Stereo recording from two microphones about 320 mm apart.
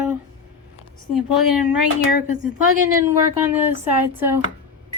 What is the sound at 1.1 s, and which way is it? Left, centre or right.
Speech, centre.